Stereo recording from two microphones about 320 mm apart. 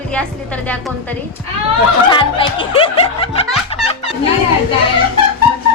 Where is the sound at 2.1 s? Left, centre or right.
Centre.